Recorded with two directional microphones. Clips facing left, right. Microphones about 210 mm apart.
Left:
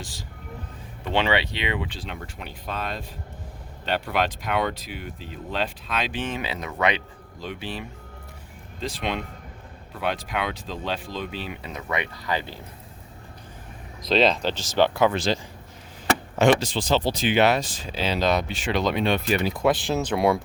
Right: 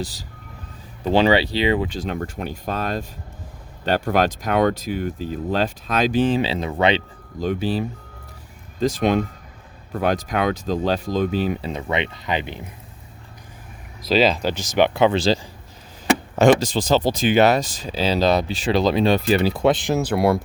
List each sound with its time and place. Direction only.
0.0 s speech: 40° right (ahead or behind)
7.3 s speech: 45° right (ahead or behind); by 12.6 s 20° right (ahead or behind)
14.0 s speech: 5° right (ahead or behind); by 15.4 s 30° right (ahead or behind)
16.3 s speech: 40° right (ahead or behind); by 20.4 s 5° right (ahead or behind)